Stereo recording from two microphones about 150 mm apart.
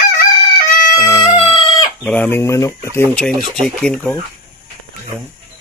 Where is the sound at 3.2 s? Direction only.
5° left (ahead or behind).